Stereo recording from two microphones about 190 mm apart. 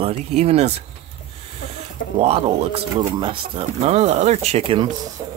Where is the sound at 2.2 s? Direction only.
30° right (ahead or behind).